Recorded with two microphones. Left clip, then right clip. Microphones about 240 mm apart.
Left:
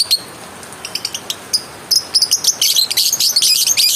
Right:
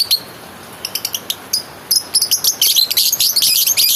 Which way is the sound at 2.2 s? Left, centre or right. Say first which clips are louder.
Left 1 dB; centre.